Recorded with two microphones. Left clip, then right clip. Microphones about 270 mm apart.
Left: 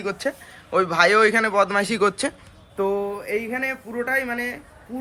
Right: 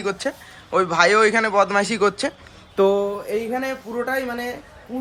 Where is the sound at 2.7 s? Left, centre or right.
Right.